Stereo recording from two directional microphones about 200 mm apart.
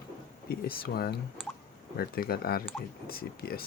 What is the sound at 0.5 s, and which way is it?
Speech, 50° left (ahead or behind).